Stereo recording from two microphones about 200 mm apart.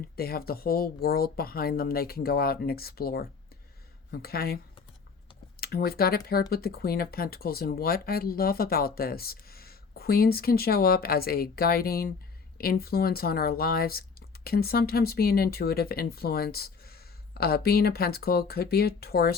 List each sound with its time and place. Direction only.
0.2 s speech: 50° left (ahead or behind)